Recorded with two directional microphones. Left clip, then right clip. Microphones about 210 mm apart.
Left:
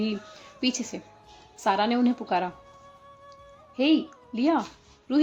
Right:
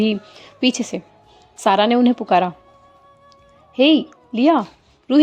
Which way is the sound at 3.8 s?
40° right (ahead or behind).